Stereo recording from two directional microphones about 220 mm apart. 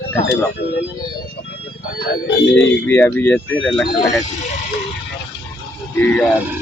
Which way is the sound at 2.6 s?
10° left (ahead or behind).